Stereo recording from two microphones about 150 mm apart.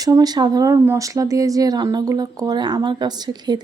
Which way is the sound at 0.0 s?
25° right (ahead or behind).